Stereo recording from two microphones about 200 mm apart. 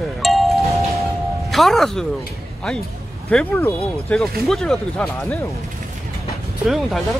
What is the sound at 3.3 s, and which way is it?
Speech, 5° left (ahead or behind).